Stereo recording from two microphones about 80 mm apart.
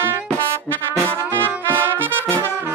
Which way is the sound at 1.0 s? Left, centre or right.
Right.